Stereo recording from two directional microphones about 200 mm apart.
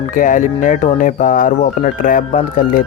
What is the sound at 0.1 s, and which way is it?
Speech, 40° left (ahead or behind).